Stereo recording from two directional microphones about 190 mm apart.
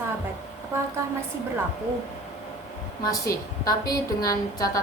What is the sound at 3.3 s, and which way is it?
Speech, 50° left (ahead or behind).